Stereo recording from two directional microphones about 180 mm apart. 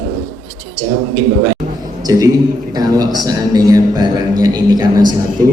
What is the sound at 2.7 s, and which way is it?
A man's voice, 20° right (ahead or behind).